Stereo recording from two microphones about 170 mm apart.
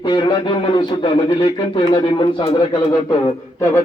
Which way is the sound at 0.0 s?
25° left (ahead or behind).